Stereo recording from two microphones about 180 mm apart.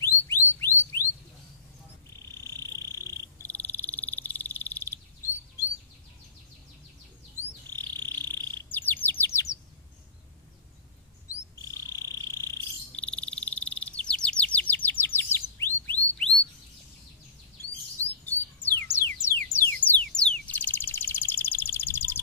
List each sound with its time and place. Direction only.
0.0 s a sound: 15° left (ahead or behind)
2.4 s frog: 15° left (ahead or behind)
7.9 s chirp: 10° left (ahead or behind)
11.7 s frog: 20° left (ahead or behind)
12.9 s frog: 5° left (ahead or behind)
18.2 s bird: 10° left (ahead or behind)
19.2 s a sound: 15° left (ahead or behind)